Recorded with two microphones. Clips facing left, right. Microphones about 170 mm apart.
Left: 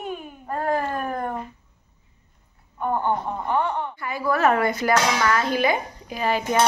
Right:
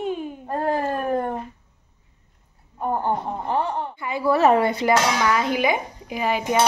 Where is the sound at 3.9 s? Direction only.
20° right (ahead or behind).